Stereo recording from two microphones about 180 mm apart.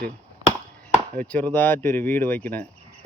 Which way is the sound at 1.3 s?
10° left (ahead or behind).